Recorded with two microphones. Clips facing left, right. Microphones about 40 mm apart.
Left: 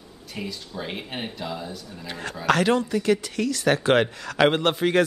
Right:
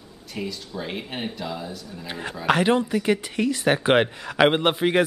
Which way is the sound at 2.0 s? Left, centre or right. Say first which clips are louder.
Even; centre.